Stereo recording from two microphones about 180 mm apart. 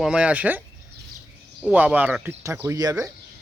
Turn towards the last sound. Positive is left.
turn(degrees=-20)  # may be behind; listen again after turning